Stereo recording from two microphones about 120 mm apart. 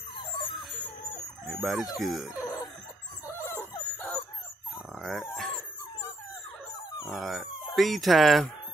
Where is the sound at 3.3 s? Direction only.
20° left (ahead or behind).